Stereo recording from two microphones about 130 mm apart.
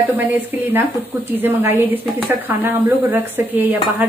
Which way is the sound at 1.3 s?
15° right (ahead or behind).